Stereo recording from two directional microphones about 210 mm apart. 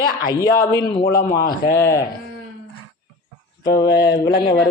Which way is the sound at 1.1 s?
45° left (ahead or behind).